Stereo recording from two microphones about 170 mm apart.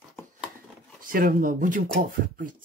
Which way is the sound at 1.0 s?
55° right (ahead or behind).